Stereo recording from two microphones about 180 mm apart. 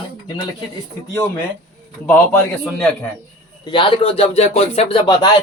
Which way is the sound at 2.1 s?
5° left (ahead or behind).